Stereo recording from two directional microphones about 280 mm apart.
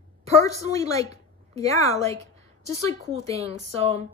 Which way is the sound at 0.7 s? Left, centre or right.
Centre.